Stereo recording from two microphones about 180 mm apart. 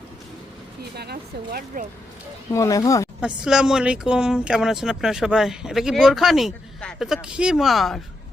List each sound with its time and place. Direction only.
0.8 s speech: 60° right (ahead or behind)
2.5 s speech: 20° left (ahead or behind)
3.2 s speech: 5° right (ahead or behind)